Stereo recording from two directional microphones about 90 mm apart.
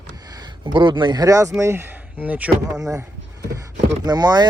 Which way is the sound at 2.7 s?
35° right (ahead or behind).